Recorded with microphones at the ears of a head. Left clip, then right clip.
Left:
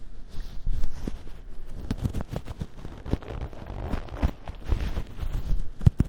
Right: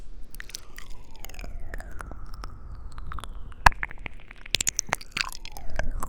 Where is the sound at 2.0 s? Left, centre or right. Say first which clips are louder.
Left 8 dB; left.